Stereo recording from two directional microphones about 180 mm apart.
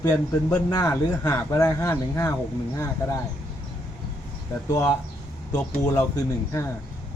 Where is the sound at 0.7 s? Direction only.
20° left (ahead or behind).